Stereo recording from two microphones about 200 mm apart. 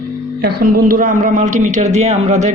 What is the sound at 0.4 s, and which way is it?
Speech, 45° right (ahead or behind).